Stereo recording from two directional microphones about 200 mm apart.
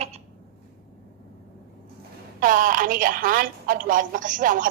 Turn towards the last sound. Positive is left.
turn(degrees=-40)  # may be behind; listen again after turning